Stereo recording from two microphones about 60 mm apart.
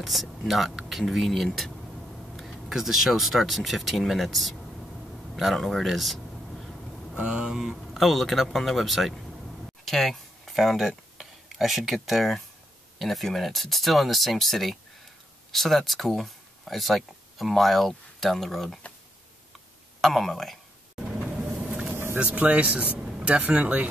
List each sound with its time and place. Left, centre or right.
0.0 s speech: centre
5.3 s a sound: centre
7.2 s speech: centre
20.0 s speech: centre
21.0 s vehicle: centre
21.5 s vehicle: right
21.9 s vehicle: right
22.2 s speech: right